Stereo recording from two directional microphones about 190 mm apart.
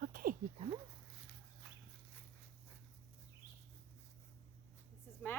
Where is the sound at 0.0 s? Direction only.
45° right (ahead or behind).